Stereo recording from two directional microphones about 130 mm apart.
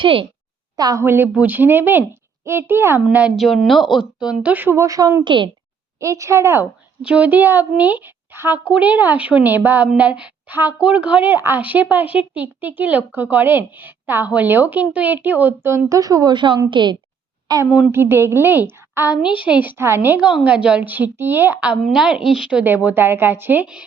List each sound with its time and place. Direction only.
0.0 s a woman's voice: 45° right (ahead or behind)
0.8 s a woman's voice: 30° right (ahead or behind)
1.0 s a woman's voice: 15° right (ahead or behind)
3.3 s a woman's voice: centre (ahead or behind); by 5.2 s 25° right (ahead or behind)
5.2 s a woman's voice: 40° right (ahead or behind)
6.0 s a woman's voice: 25° right (ahead or behind)
17.7 s a woman's voice: 5° right (ahead or behind)
17.9 s a woman's voice: 20° right (ahead or behind)